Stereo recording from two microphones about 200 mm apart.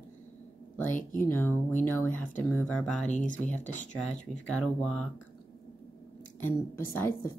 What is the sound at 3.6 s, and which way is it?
Speech, 40° left (ahead or behind).